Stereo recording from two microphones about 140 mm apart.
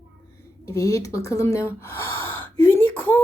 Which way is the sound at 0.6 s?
25° left (ahead or behind).